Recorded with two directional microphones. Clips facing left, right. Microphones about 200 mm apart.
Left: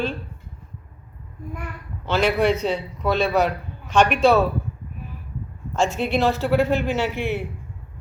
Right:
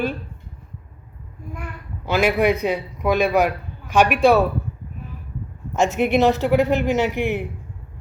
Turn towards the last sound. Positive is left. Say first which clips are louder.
# right 3 dB
turn(degrees=-15)  # may be behind; listen again after turning